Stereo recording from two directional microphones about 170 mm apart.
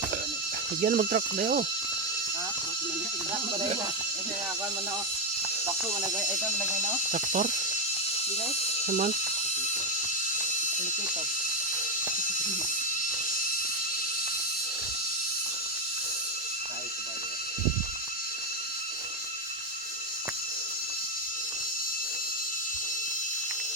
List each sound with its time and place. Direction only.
0.8 s speech: 50° right (ahead or behind)
5.6 s speech: 15° right (ahead or behind)
7.1 s speech: 50° right (ahead or behind)
8.9 s speech: 50° right (ahead or behind)